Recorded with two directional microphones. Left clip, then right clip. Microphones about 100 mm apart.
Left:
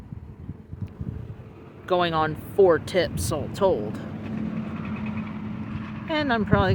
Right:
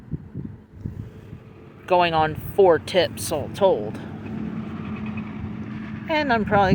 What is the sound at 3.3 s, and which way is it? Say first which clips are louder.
Speech: right 3 dB; 15° left (ahead or behind).